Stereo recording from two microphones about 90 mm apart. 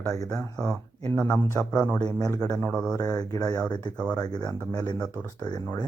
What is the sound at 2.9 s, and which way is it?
Speech, 45° left (ahead or behind).